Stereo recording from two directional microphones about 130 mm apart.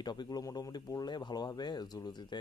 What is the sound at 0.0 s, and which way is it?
Speech, 35° left (ahead or behind).